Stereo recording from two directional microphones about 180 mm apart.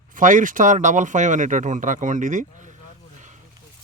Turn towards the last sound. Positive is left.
turn(degrees=-40)  # may be behind; listen again after turning